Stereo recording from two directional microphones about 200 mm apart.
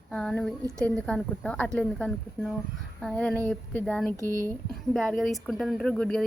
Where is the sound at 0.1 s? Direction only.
5° left (ahead or behind).